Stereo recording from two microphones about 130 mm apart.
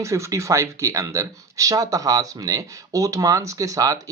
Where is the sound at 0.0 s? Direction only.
25° right (ahead or behind).